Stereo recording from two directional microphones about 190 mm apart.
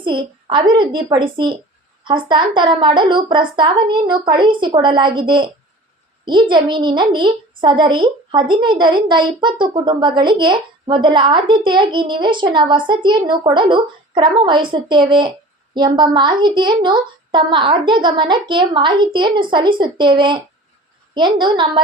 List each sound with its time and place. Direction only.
0.0 s a woman's voice: 25° right (ahead or behind)